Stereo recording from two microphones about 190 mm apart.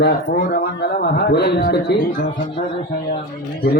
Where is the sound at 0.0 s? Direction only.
60° left (ahead or behind).